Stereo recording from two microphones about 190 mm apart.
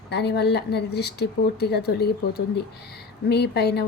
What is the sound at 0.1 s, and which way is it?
A woman's voice, 60° left (ahead or behind).